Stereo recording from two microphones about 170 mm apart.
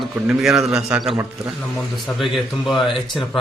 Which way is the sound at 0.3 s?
Centre (ahead or behind).